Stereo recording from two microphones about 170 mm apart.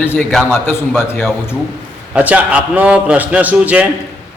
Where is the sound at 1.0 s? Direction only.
15° left (ahead or behind).